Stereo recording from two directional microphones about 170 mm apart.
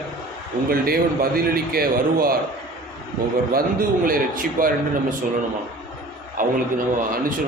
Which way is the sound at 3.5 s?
55° right (ahead or behind).